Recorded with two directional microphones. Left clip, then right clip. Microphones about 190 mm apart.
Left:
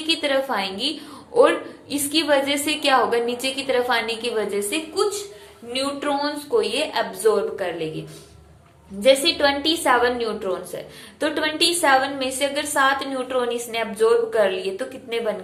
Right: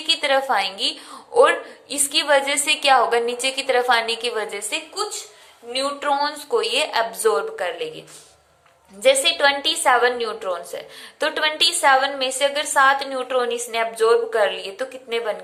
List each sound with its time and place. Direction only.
0.1 s a woman's voice: 25° right (ahead or behind)
9.0 s a woman's voice: 25° right (ahead or behind)